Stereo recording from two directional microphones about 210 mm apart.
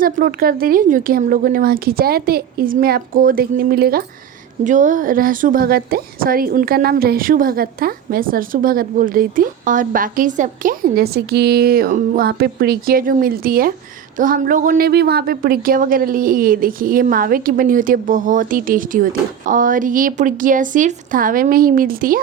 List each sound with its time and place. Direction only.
0.0 s a woman's voice: 45° right (ahead or behind)